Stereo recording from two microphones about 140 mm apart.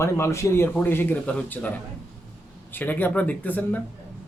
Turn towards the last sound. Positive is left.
turn(degrees=10)  # may be behind; listen again after turning